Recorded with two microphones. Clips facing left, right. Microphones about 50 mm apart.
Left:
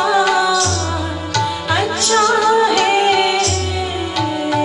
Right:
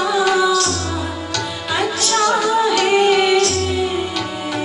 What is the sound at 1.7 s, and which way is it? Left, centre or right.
Music, left.